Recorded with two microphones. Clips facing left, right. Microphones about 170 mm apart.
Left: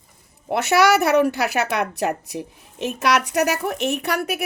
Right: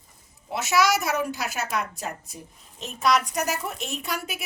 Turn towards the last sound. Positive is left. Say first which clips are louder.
# left 8 dB
turn(degrees=65)  # may be behind; listen again after turning